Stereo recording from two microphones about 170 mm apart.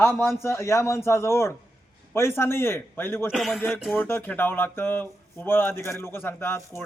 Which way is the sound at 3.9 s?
10° left (ahead or behind).